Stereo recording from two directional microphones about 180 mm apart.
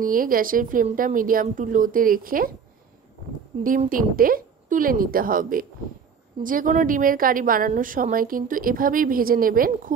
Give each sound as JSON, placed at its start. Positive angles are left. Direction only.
{"t": 0.0, "sound": "a woman's voice", "side_deg": -50}
{"t": 3.5, "sound": "speech", "side_deg": -30}
{"t": 3.9, "sound": "a woman's voice", "side_deg": -50}